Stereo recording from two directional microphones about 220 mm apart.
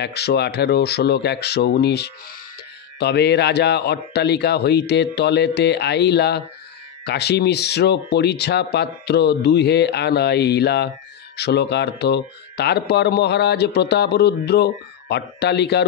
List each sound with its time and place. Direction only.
0.0 s speech: 50° left (ahead or behind)